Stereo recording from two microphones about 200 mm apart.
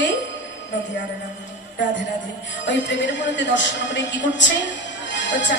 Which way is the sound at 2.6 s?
65° left (ahead or behind).